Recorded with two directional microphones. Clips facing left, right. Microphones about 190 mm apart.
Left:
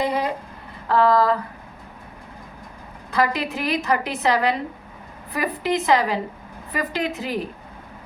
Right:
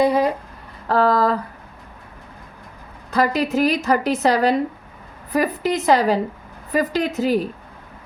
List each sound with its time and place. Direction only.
0.0 s a sound: 45° right (ahead or behind)
0.9 s a woman's voice: 40° right (ahead or behind)
3.1 s a woman's voice: 40° right (ahead or behind)